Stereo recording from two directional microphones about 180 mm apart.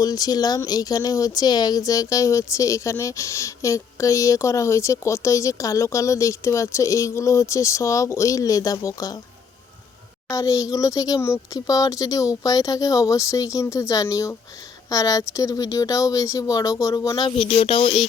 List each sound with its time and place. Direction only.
0.0 s speech: 20° left (ahead or behind)
10.2 s speech: 15° left (ahead or behind)